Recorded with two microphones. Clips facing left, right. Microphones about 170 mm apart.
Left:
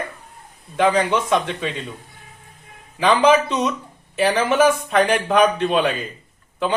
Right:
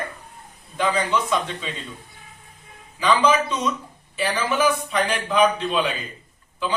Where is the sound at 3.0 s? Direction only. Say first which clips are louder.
Left 4 dB; 60° left (ahead or behind).